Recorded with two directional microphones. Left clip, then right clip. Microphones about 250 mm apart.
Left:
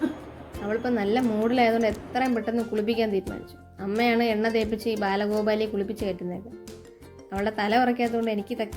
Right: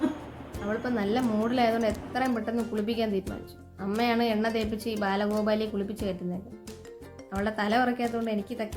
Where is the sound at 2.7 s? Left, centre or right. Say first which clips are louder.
Left 5 dB; centre.